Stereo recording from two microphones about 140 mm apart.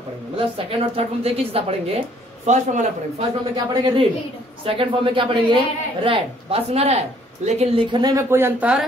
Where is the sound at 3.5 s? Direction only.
35° right (ahead or behind).